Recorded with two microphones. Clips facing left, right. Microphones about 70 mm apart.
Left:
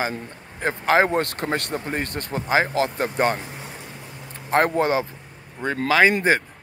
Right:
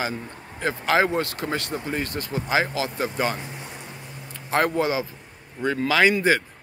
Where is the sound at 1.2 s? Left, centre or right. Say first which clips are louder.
Left 2 dB; left.